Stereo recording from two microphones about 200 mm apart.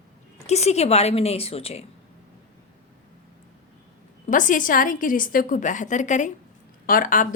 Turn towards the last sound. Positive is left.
turn(degrees=40)  # may be behind; listen again after turning